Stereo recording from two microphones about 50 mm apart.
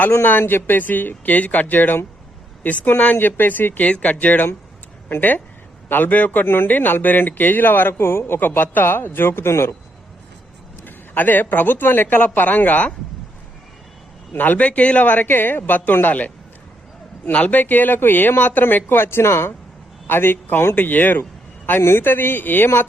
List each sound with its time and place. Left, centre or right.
0.3 s a man's voice: left
3.8 s a man's voice: left
8.4 s speech: left
10.8 s a man's voice: left
14.3 s a man's voice: left
17.3 s a man's voice: left
20.1 s a man's voice: left
21.7 s speech: left